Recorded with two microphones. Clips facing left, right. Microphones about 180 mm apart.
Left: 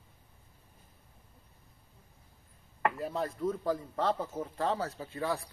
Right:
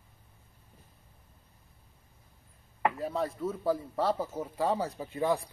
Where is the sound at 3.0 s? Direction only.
Centre (ahead or behind); by 5.5 s 20° right (ahead or behind).